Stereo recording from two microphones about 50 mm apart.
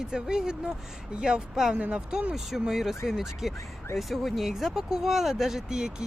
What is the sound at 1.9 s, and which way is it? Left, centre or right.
Speech, right.